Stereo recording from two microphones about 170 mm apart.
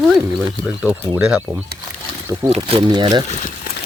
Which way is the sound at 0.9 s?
5° right (ahead or behind).